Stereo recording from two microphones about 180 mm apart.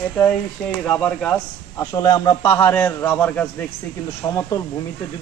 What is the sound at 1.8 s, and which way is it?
A man's voice, 20° left (ahead or behind).